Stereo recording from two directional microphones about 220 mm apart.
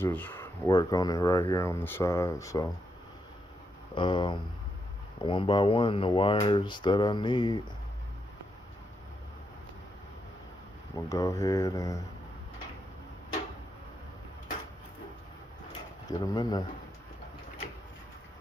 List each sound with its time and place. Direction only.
0.0 s speech: 10° left (ahead or behind)
3.9 s speech: 20° left (ahead or behind)
10.9 s speech: 15° left (ahead or behind)
16.0 s speech: 15° left (ahead or behind)